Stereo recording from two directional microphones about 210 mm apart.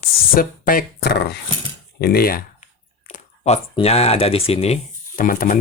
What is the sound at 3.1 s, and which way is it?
Speech, 30° left (ahead or behind).